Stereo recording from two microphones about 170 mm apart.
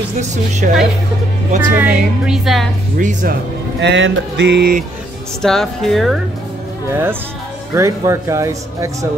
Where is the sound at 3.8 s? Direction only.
90° right.